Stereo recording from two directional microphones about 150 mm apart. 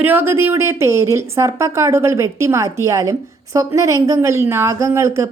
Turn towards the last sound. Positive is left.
turn(degrees=-20)  # may be behind; listen again after turning